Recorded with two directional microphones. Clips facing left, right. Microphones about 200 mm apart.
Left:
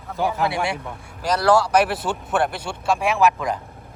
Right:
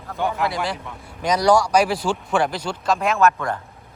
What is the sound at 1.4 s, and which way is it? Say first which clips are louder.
Speech: even; 5° left (ahead or behind).